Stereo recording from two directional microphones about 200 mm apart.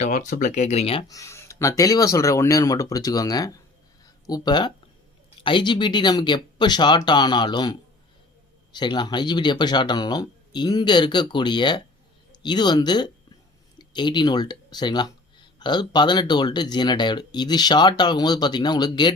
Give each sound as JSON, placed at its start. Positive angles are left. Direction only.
{"t": 0.0, "sound": "speech", "side_deg": 40}
{"t": 4.0, "sound": "a sound", "side_deg": 20}
{"t": 5.4, "sound": "speech", "side_deg": 25}